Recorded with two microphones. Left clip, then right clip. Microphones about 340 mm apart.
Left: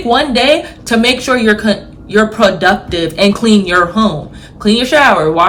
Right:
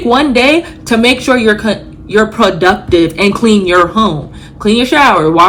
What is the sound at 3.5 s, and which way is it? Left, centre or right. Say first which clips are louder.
Speech: right 2 dB; left.